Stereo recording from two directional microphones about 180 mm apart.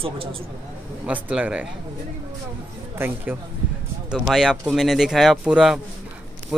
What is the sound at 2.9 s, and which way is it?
Speech, 10° right (ahead or behind).